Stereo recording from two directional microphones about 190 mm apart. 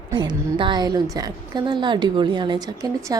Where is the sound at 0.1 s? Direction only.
25° right (ahead or behind).